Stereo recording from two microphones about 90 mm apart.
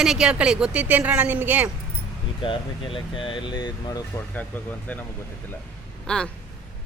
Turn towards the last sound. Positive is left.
turn(degrees=15)  # may be behind; listen again after turning